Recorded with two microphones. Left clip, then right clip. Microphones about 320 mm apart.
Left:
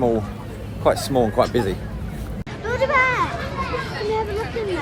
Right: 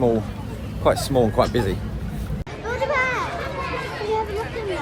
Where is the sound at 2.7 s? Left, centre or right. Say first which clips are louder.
Left 4 dB; left.